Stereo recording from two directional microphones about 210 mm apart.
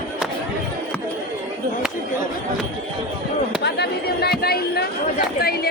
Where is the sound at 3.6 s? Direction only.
50° left (ahead or behind).